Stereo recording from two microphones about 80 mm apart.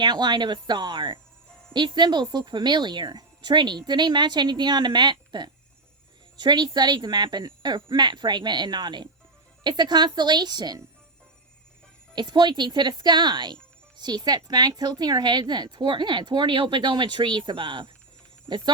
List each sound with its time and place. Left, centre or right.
0.0 s speech: right
12.1 s speech: right
18.4 s speech: right